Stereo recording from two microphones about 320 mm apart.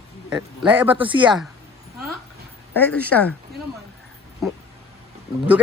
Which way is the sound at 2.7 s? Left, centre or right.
Centre.